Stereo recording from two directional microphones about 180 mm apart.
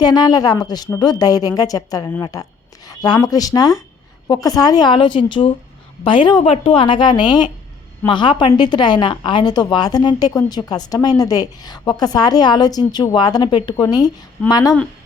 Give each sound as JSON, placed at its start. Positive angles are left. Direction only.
{"t": 0.0, "sound": "a woman's voice", "side_deg": 20}